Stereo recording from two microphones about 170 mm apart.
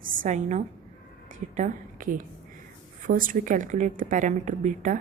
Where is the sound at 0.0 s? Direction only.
55° right (ahead or behind).